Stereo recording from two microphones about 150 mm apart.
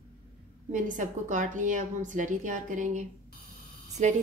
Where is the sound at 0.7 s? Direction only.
55° right (ahead or behind).